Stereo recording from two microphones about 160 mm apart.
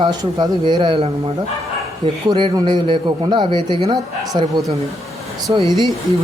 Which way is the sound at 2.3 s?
30° right (ahead or behind).